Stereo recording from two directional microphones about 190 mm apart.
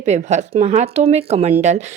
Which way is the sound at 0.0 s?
35° right (ahead or behind).